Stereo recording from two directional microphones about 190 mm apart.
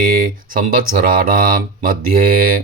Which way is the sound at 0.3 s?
45° right (ahead or behind).